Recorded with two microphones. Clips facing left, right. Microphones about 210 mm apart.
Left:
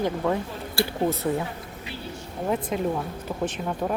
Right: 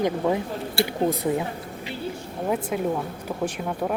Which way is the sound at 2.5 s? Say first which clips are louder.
Right 1 dB; 5° right (ahead or behind).